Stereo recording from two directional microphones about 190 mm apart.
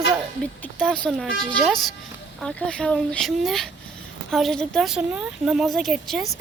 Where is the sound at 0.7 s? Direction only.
5° left (ahead or behind).